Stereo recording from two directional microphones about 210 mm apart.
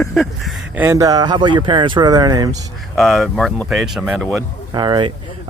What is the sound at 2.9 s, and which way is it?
Speech, centre (ahead or behind).